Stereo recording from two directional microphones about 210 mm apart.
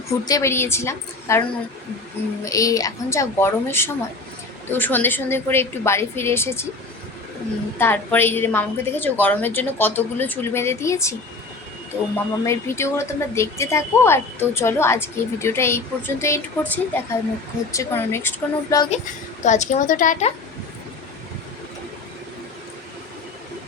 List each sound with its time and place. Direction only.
0.1 s a woman's voice: 15° left (ahead or behind)
2.4 s a woman's voice: 15° left (ahead or behind)
7.8 s a woman's voice: 10° left (ahead or behind)
12.1 s a woman's voice: 10° left (ahead or behind)
19.5 s a woman's voice: 35° left (ahead or behind)